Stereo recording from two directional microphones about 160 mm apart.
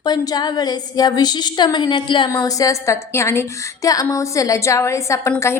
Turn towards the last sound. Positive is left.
turn(degrees=20)  # may be behind; listen again after turning